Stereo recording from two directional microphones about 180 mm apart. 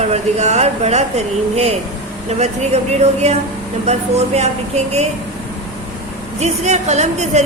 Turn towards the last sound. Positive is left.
turn(degrees=-40)  # may be behind; listen again after turning